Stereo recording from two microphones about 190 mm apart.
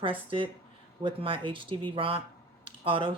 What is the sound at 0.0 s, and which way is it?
Speech, 25° right (ahead or behind).